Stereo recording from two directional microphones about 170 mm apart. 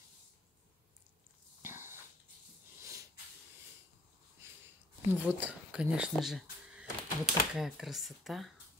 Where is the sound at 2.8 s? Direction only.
20° right (ahead or behind).